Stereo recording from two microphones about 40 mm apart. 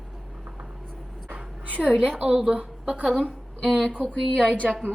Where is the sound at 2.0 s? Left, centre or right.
Right.